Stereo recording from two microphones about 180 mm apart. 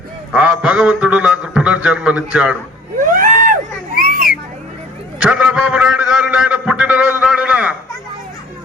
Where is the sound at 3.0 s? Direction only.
50° right (ahead or behind).